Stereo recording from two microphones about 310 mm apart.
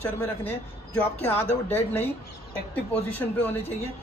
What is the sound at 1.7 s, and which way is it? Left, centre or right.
A man's voice, centre.